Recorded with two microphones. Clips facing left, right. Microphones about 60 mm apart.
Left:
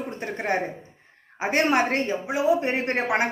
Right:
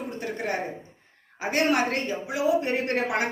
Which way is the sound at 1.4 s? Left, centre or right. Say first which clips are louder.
Left 2 dB; left.